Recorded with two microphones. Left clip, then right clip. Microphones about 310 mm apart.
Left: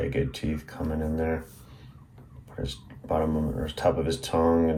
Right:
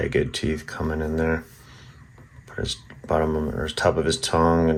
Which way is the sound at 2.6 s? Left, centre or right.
Right.